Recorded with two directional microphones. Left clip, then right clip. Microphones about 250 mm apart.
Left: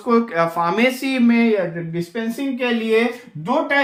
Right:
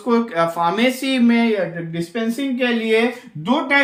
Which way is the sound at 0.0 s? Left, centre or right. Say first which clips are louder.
Left 1 dB; centre.